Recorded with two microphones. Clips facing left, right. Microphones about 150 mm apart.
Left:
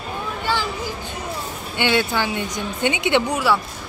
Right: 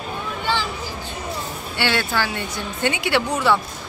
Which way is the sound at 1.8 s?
15° left (ahead or behind).